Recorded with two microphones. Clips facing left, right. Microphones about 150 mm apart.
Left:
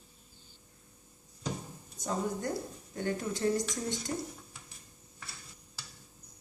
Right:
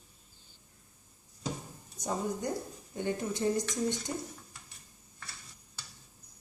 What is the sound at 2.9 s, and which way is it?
Speech, 15° right (ahead or behind).